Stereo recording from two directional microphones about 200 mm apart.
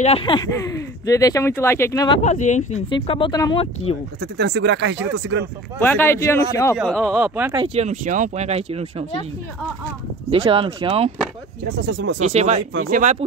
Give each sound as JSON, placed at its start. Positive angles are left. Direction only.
{"t": 0.0, "sound": "speech", "side_deg": 25}
{"t": 2.2, "sound": "speech", "side_deg": 35}
{"t": 2.9, "sound": "speech", "side_deg": 25}
{"t": 4.2, "sound": "speech", "side_deg": -55}
{"t": 5.8, "sound": "speech", "side_deg": 10}
{"t": 6.8, "sound": "speech", "side_deg": 0}
{"t": 7.6, "sound": "speech", "side_deg": -35}
{"t": 10.3, "sound": "speech", "side_deg": -25}
{"t": 11.8, "sound": "speech", "side_deg": -65}
{"t": 12.2, "sound": "speech", "side_deg": -35}